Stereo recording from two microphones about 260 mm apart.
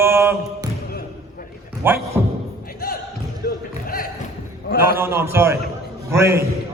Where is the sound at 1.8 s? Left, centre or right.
Centre.